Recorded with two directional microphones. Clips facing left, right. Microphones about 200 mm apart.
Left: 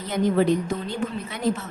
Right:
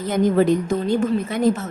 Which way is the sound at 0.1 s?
45° right (ahead or behind).